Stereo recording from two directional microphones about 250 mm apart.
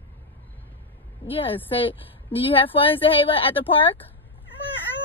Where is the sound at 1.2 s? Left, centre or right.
Left.